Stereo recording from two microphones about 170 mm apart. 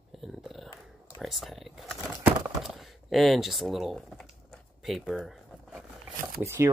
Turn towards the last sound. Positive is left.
turn(degrees=-15)  # may be behind; listen again after turning